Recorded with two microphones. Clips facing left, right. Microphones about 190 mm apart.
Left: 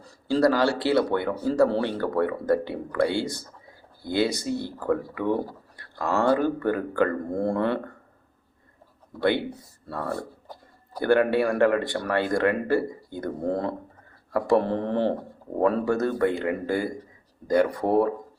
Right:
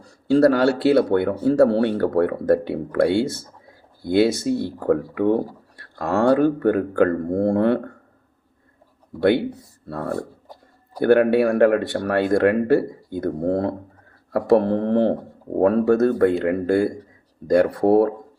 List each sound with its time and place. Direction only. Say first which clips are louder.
0.3 s speech: right 5 dB; 60° right (ahead or behind)
9.9 s speech: right 4 dB; 50° right (ahead or behind)
13.1 s speech: right 6 dB; 50° right (ahead or behind); by 18.1 s 70° right (ahead or behind)